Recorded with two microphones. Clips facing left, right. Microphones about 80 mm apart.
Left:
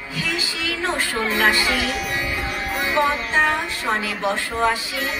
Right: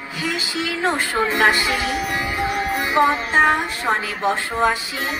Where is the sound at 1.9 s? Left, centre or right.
Right.